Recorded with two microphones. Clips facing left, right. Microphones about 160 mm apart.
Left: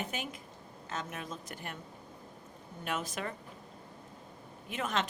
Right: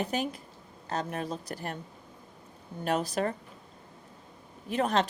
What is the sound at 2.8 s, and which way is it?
Speech, 35° right (ahead or behind).